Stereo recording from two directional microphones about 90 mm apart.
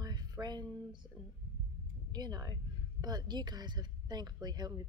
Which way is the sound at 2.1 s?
50° right (ahead or behind).